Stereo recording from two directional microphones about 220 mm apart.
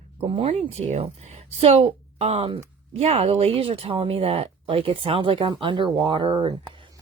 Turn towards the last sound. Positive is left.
turn(degrees=-20)  # may be behind; listen again after turning